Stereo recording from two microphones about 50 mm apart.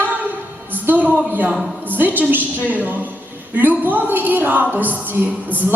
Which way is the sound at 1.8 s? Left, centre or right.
Right.